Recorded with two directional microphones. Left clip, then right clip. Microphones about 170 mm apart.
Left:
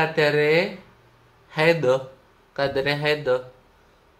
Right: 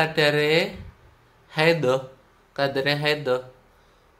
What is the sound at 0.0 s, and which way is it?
Speech, 15° right (ahead or behind).